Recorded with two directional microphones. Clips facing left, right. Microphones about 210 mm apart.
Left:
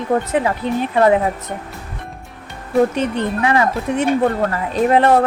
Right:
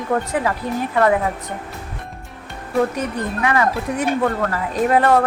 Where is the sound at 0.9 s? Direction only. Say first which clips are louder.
Left 3 dB; 25° left (ahead or behind).